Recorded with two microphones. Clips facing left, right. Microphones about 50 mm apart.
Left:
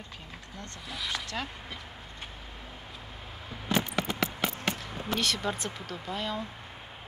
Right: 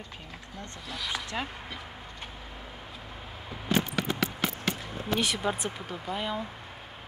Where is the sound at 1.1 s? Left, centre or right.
Centre.